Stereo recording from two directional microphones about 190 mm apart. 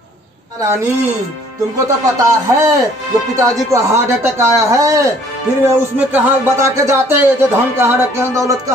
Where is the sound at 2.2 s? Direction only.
15° right (ahead or behind).